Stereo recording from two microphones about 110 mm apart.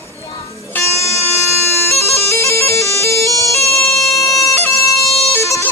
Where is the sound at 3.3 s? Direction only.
25° left (ahead or behind).